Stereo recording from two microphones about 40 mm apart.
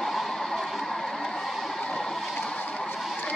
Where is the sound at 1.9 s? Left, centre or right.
Centre.